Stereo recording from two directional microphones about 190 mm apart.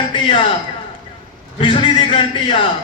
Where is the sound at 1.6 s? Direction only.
25° left (ahead or behind).